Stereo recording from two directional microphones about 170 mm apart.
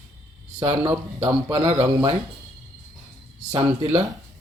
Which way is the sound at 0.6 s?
30° right (ahead or behind).